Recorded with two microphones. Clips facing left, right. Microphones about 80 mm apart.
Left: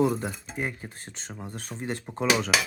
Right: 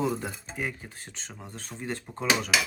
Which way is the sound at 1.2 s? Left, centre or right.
Centre.